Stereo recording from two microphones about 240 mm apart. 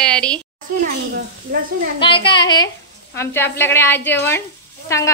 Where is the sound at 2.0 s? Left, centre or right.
Left.